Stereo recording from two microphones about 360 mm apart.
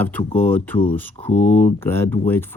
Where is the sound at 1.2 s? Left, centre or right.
Centre.